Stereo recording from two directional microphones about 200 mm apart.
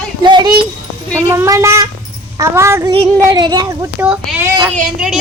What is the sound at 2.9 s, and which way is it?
Speech, 25° right (ahead or behind).